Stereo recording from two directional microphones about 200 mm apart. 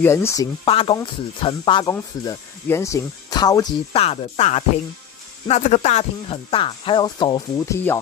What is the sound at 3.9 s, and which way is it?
Speech, 30° left (ahead or behind).